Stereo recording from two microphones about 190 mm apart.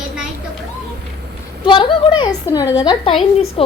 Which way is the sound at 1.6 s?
25° left (ahead or behind).